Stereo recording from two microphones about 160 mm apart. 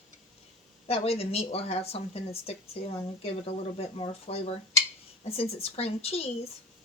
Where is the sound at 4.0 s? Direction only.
40° left (ahead or behind).